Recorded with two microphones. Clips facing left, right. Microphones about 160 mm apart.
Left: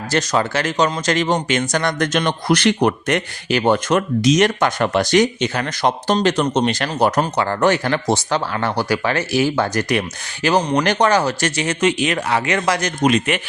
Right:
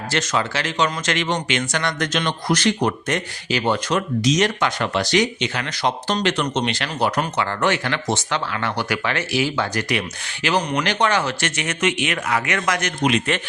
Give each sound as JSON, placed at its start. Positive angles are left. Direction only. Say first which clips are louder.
{"t": 0.1, "sound": "speech", "louder": "left 4 dB", "side_deg": 40}
{"t": 10.6, "sound": "speech", "louder": "left 4 dB", "side_deg": 30}